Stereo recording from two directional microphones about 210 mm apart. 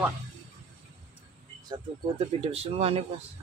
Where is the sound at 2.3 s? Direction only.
30° right (ahead or behind).